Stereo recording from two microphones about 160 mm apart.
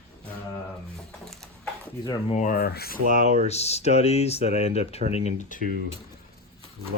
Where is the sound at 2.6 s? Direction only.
75° left (ahead or behind).